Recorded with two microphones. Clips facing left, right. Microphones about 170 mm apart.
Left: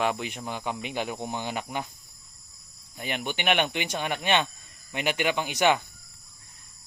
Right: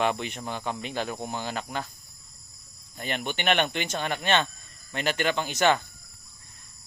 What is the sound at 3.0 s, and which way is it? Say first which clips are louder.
Speech: even; 10° left (ahead or behind).